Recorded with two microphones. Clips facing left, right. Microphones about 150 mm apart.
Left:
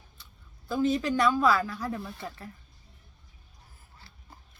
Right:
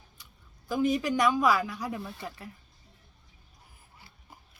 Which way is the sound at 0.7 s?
15° right (ahead or behind).